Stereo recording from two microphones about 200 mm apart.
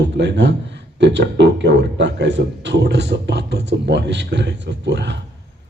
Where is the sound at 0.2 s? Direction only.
60° right (ahead or behind).